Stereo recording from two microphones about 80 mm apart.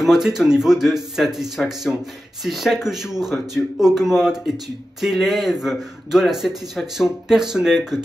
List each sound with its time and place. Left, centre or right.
0.0 s a man's voice: centre